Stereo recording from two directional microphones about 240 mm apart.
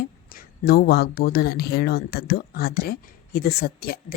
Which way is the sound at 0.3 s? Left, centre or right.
Left.